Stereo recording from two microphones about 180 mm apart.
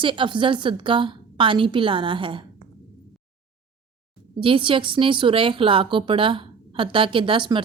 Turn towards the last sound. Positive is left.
turn(degrees=-25)  # may be behind; listen again after turning